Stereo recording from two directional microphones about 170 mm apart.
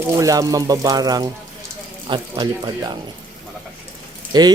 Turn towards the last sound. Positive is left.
turn(degrees=-25)  # may be behind; listen again after turning